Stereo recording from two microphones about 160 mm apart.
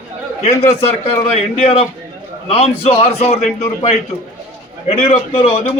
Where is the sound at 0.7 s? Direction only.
40° left (ahead or behind).